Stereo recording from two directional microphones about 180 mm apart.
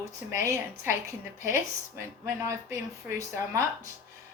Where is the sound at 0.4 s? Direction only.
15° right (ahead or behind).